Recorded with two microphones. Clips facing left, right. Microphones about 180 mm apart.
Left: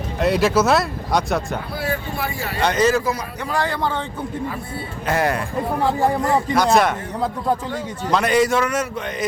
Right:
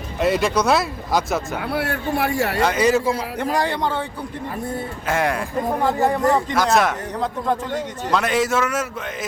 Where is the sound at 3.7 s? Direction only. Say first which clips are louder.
Even; 15° right (ahead or behind).